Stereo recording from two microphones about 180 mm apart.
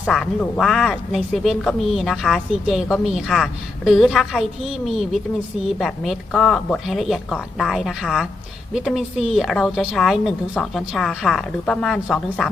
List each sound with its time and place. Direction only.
0.0 s speech: 5° left (ahead or behind)